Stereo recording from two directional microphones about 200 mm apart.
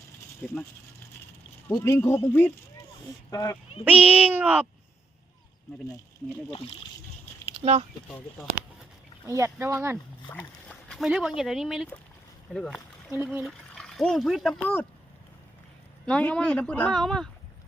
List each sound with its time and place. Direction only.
0.4 s speech: centre (ahead or behind)
1.6 s a man's voice: 10° left (ahead or behind)
3.8 s speech: 5° right (ahead or behind)
7.5 s speech: 30° right (ahead or behind)
9.2 s speech: 15° right (ahead or behind)
10.2 s speech: 5° left (ahead or behind)
16.0 s speech: 5° left (ahead or behind)